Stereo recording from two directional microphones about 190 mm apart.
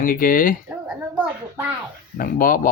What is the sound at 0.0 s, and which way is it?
Speech, 45° left (ahead or behind).